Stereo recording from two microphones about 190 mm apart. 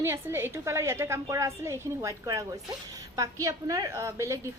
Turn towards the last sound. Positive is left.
turn(degrees=-15)  # may be behind; listen again after turning